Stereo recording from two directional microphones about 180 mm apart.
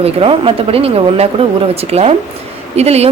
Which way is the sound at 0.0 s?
30° right (ahead or behind).